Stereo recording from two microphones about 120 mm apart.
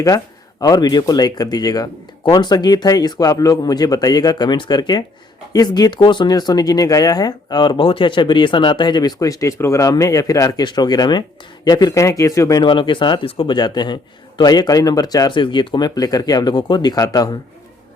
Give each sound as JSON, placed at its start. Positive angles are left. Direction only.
{"t": 0.6, "sound": "speech", "side_deg": 35}
{"t": 12.6, "sound": "speech", "side_deg": 40}